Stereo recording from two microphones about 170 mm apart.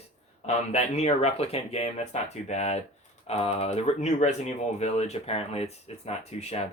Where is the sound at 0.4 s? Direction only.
40° left (ahead or behind).